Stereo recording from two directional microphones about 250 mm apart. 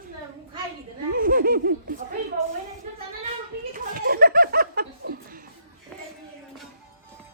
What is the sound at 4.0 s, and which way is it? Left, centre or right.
Laughter, right.